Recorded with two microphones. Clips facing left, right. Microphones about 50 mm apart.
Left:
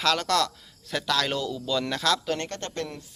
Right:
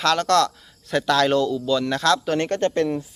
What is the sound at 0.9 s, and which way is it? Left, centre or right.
Speech, centre.